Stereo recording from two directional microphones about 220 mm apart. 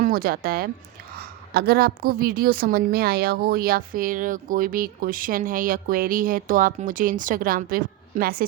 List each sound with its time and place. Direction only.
0.0 s a woman's voice: 40° right (ahead or behind)